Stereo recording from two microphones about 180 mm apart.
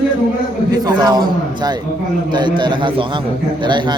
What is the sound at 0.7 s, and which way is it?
A man's voice, 20° right (ahead or behind).